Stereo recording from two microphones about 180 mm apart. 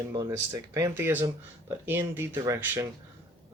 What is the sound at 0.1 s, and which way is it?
Speech, 20° right (ahead or behind).